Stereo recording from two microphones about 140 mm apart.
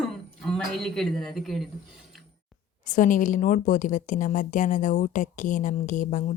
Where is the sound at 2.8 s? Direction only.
65° left (ahead or behind).